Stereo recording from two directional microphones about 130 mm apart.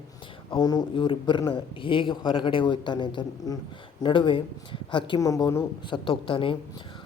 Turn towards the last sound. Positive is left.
turn(degrees=45)  # may be behind; listen again after turning